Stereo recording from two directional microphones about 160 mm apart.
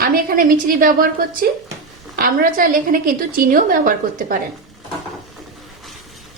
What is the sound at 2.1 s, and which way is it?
A woman's voice, 65° right (ahead or behind).